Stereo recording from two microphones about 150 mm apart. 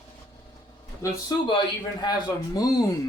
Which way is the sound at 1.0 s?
25° left (ahead or behind).